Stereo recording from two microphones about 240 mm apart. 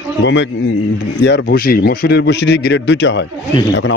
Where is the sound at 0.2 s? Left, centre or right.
Left.